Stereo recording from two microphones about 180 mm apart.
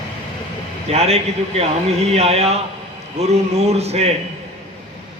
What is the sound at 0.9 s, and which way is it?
A man's voice, 35° right (ahead or behind).